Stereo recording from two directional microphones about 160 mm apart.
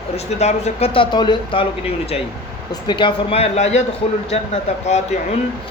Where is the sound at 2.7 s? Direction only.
30° left (ahead or behind); by 3.8 s 45° left (ahead or behind).